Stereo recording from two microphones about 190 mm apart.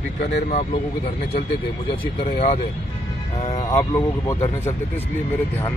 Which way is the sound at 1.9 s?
30° left (ahead or behind).